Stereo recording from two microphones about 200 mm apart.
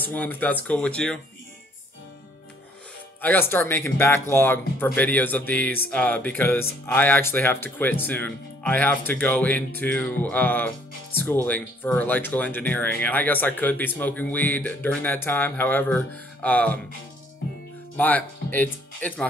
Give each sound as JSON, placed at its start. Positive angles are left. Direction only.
{"t": 0.0, "sound": "speech", "side_deg": 10}
{"t": 3.2, "sound": "speech", "side_deg": 10}
{"t": 17.9, "sound": "speech", "side_deg": 10}